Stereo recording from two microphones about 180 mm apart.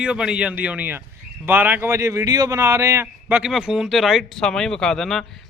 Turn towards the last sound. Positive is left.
turn(degrees=5)  # may be behind; listen again after turning